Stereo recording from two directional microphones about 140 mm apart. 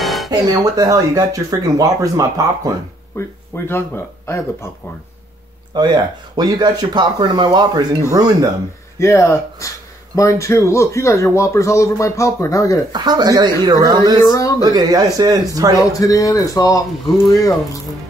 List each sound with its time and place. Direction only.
0.0 s music: centre (ahead or behind)
0.3 s speech: 25° right (ahead or behind)
3.2 s speech: 15° left (ahead or behind)
5.8 s speech: 30° right (ahead or behind)
8.9 s speech: 20° left (ahead or behind)
12.9 s speech: 30° right (ahead or behind)
15.8 s speech: 25° left (ahead or behind)